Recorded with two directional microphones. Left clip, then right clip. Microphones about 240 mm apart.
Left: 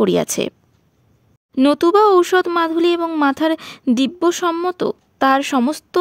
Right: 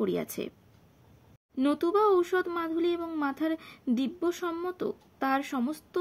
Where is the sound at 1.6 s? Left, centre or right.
Left.